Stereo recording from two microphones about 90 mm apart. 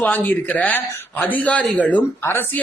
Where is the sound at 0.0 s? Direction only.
20° left (ahead or behind).